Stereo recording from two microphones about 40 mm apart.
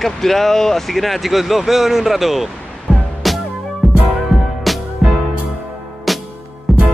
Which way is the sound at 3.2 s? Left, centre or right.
Centre.